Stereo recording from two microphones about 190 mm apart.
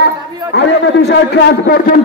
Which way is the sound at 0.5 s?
65° left (ahead or behind).